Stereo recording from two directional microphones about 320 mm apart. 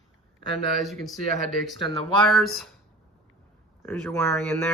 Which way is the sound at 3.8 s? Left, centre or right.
Centre.